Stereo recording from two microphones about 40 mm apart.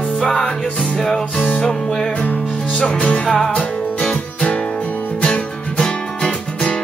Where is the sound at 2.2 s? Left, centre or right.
Left.